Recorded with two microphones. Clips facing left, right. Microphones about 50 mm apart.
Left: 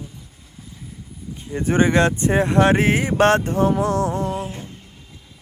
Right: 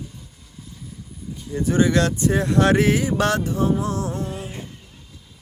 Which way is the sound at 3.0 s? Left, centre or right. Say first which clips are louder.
Left 4 dB; left.